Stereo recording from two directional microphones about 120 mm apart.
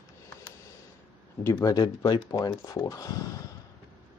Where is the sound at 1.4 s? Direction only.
25° left (ahead or behind).